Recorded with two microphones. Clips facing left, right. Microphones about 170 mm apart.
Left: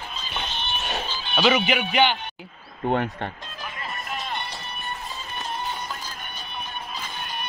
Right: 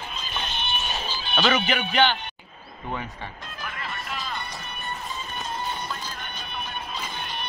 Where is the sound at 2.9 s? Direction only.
65° left (ahead or behind).